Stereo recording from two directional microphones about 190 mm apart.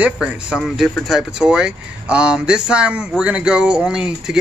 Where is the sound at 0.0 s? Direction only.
5° right (ahead or behind).